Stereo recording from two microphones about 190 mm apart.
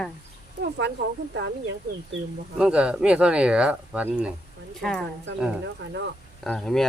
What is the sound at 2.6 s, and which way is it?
Speech, 5° right (ahead or behind).